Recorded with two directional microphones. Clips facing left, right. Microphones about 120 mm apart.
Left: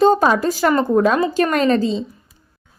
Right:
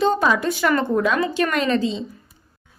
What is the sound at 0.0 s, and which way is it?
A woman's voice, 40° left (ahead or behind).